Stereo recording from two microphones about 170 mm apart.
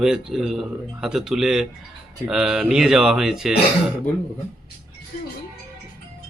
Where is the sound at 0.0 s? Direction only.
5° right (ahead or behind).